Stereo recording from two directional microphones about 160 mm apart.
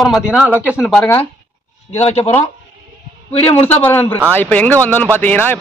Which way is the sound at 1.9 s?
45° left (ahead or behind).